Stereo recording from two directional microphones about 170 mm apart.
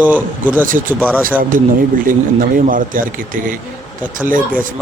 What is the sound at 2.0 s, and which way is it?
Speech, 50° right (ahead or behind).